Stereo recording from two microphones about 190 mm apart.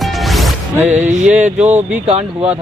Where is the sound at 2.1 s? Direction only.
35° right (ahead or behind).